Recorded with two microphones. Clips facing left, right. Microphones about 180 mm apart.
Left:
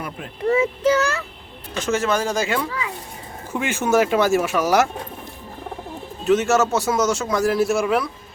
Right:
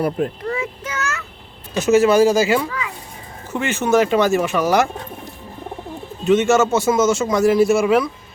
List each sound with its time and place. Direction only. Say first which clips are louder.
0.4 s child singing: left 8 dB; 30° left (ahead or behind)
1.7 s speech: right 8 dB; 10° right (ahead or behind)
3.5 s speech: right 2 dB; 10° left (ahead or behind)
6.2 s speech: right 3 dB; centre (ahead or behind)